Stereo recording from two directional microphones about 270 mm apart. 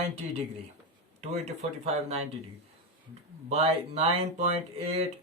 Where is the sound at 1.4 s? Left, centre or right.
Right.